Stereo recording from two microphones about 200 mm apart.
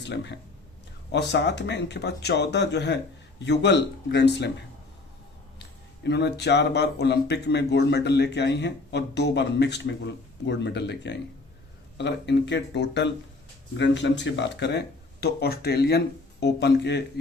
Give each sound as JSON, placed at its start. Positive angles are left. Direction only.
{"t": 0.0, "sound": "speech", "side_deg": 60}
{"t": 5.5, "sound": "speech", "side_deg": 60}